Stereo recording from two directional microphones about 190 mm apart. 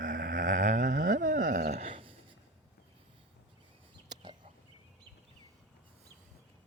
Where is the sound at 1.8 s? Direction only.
30° right (ahead or behind).